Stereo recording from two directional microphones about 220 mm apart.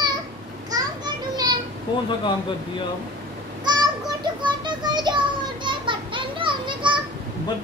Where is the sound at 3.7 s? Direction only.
20° right (ahead or behind).